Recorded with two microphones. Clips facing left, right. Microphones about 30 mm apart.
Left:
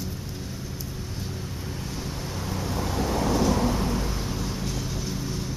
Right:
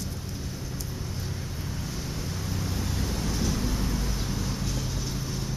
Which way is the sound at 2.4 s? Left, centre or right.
Centre.